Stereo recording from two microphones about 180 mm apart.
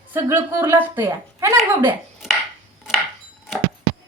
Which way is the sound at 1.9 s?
Centre (ahead or behind).